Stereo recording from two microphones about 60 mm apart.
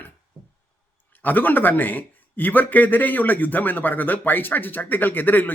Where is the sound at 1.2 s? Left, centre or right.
Left.